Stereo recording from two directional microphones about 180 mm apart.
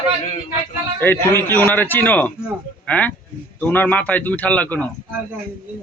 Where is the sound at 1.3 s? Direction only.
10° left (ahead or behind).